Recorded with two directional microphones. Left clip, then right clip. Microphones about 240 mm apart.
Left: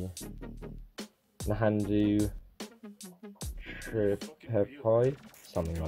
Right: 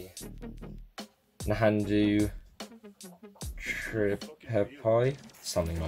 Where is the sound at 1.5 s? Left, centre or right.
Centre.